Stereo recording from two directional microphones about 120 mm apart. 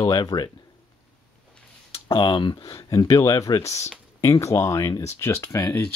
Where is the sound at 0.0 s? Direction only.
35° left (ahead or behind).